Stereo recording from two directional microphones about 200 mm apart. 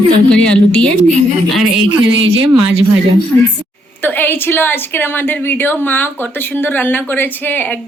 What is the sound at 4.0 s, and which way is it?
A woman's voice, 10° left (ahead or behind).